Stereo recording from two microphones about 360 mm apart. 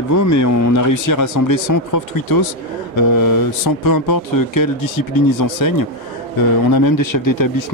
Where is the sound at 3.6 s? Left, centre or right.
Left.